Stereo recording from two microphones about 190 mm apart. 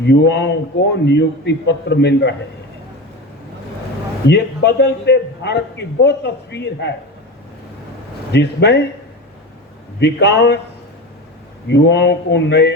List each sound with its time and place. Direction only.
0.0 s a man's voice: 60° left (ahead or behind)
4.3 s a man's voice: 60° left (ahead or behind)
8.3 s a man's voice: 60° left (ahead or behind)
10.0 s a man's voice: 65° left (ahead or behind)
11.7 s a man's voice: 65° left (ahead or behind)